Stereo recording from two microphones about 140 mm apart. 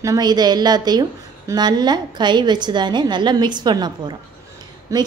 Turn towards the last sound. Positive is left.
turn(degrees=-25)  # may be behind; listen again after turning